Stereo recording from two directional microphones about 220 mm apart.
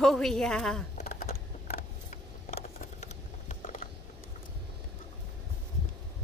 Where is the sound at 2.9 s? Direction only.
35° left (ahead or behind).